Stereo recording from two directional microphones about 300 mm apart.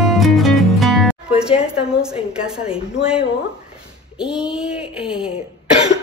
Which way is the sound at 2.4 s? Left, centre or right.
Centre.